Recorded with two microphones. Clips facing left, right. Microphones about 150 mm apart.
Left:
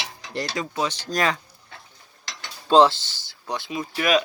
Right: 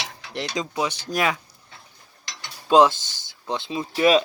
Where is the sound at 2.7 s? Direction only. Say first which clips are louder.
Even; 15° right (ahead or behind).